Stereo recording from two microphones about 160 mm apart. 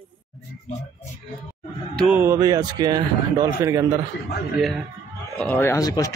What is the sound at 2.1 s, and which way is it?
Speech, 15° right (ahead or behind).